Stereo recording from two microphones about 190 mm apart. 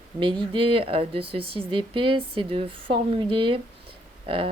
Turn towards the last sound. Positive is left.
turn(degrees=-30)  # may be behind; listen again after turning